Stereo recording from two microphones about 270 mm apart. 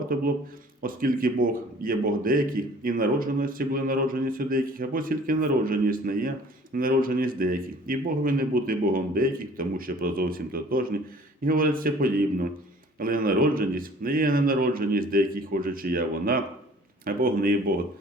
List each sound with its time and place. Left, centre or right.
0.8 s speech: right